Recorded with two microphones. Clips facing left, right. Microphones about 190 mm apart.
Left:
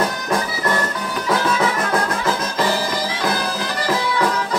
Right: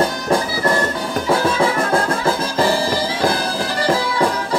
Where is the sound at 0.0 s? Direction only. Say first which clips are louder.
Right 3 dB; 30° right (ahead or behind).